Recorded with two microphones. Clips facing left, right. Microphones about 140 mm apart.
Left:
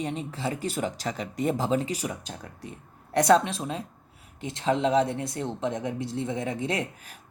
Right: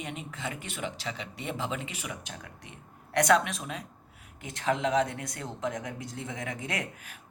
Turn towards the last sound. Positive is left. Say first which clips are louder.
# left 6 dB
turn(degrees=25)  # may be behind; listen again after turning